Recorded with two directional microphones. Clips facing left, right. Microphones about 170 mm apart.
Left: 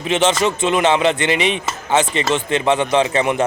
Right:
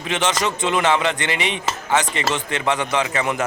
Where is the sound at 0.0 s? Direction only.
25° left (ahead or behind).